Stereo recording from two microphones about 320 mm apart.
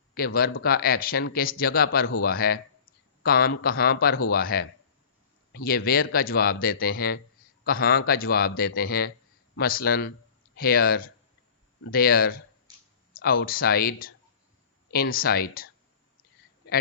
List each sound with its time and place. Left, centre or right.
0.1 s a man's voice: left
12.7 s a sound: centre
13.1 s a man's voice: left